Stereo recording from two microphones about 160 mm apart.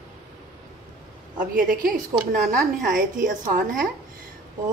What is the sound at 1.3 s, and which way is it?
A woman's voice, 55° right (ahead or behind).